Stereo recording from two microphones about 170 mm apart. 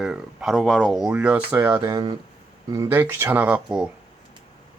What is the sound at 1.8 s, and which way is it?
Speech, 25° right (ahead or behind).